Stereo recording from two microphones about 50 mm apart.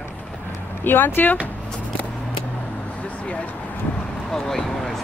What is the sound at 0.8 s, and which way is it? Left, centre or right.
Speech, left.